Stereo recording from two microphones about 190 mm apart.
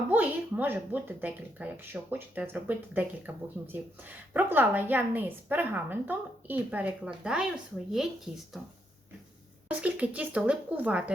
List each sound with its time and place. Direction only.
0.1 s speech: 10° right (ahead or behind)
9.6 s speech: 5° right (ahead or behind)